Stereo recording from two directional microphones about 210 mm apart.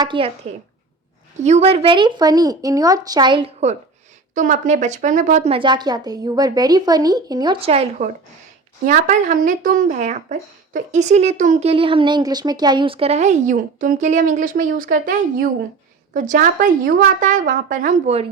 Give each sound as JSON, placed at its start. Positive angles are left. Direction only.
{"t": 0.0, "sound": "a woman's voice", "side_deg": -25}
{"t": 1.4, "sound": "a woman's voice", "side_deg": -35}